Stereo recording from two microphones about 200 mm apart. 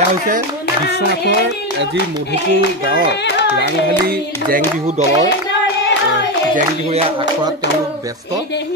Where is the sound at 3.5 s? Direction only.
55° right (ahead or behind).